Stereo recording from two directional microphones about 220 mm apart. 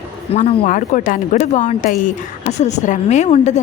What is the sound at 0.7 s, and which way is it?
Speech, 35° left (ahead or behind).